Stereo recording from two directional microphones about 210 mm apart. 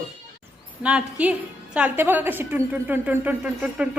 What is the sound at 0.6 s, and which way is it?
A woman's voice, 5° right (ahead or behind).